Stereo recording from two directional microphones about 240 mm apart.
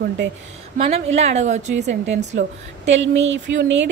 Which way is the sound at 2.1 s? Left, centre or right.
Right.